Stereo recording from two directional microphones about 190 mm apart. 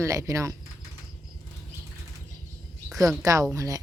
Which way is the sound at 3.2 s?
15° right (ahead or behind).